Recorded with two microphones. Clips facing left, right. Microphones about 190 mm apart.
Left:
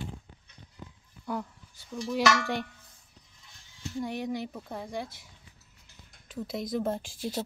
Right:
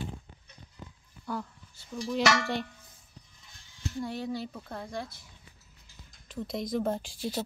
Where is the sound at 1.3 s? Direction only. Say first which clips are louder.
Left 2 dB; 20° left (ahead or behind).